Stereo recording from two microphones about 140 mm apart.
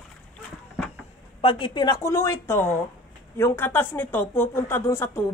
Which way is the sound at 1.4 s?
35° left (ahead or behind).